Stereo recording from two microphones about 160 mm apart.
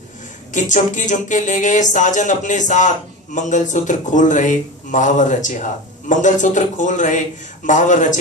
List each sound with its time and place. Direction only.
0.5 s speech: 50° left (ahead or behind)